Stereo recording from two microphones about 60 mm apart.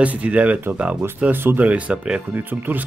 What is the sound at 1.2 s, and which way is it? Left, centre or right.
Speech, right.